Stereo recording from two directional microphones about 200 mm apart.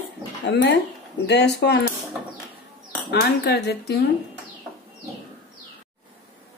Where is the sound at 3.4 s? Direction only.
50° left (ahead or behind).